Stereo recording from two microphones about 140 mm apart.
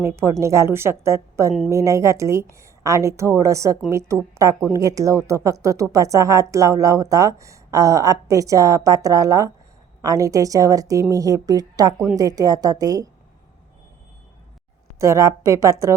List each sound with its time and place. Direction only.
0.0 s speech: 20° right (ahead or behind)
14.9 s speech: 20° right (ahead or behind)